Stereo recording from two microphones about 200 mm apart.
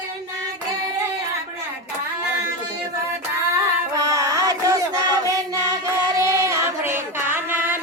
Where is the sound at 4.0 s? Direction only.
15° right (ahead or behind).